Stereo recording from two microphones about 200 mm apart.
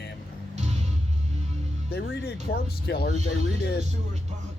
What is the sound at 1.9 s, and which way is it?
Speech, 50° left (ahead or behind).